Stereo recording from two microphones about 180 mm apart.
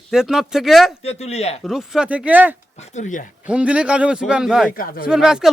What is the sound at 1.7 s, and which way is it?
Speech, centre (ahead or behind).